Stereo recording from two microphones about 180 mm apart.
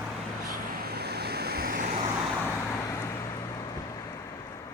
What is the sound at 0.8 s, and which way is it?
Waves, 60° right (ahead or behind).